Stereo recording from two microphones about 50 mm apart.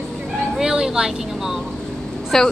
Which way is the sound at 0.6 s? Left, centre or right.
Centre.